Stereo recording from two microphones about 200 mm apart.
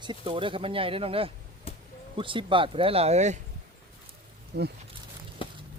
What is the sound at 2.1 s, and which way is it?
Speech, 25° right (ahead or behind).